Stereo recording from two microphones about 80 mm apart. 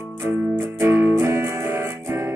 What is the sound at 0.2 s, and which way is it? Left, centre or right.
Music, right.